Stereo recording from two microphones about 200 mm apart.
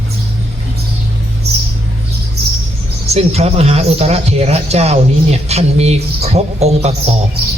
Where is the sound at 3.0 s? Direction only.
30° right (ahead or behind).